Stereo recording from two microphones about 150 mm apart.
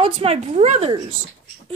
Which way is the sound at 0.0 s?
40° right (ahead or behind).